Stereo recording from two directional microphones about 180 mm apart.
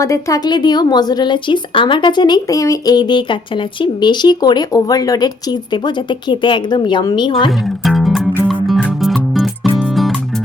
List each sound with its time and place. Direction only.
0.0 s a woman's voice: 20° left (ahead or behind)
7.6 s music: centre (ahead or behind)